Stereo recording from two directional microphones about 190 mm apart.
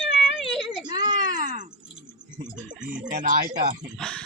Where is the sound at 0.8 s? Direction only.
20° right (ahead or behind).